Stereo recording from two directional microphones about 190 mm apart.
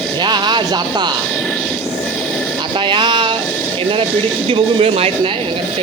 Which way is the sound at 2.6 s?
25° right (ahead or behind).